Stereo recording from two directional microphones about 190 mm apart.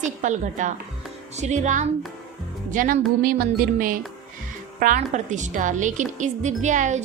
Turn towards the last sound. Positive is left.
turn(degrees=-40)  # may be behind; listen again after turning